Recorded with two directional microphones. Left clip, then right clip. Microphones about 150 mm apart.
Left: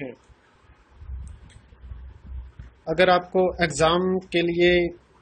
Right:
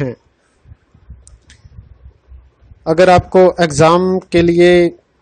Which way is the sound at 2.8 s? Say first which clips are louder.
Right 10 dB; 75° right (ahead or behind).